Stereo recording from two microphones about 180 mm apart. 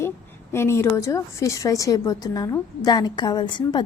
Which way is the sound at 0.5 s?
15° left (ahead or behind).